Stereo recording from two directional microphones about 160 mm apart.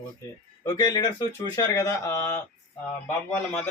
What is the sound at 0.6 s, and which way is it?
Speech, 25° left (ahead or behind).